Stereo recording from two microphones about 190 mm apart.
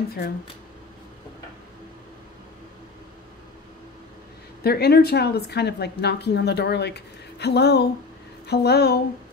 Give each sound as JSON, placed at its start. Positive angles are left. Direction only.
{"t": 4.6, "sound": "a woman's voice", "side_deg": 55}